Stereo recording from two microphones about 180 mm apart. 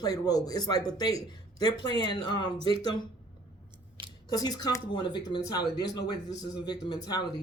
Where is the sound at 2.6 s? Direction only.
30° right (ahead or behind).